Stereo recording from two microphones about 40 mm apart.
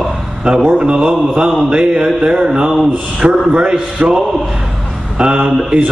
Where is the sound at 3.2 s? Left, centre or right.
Right.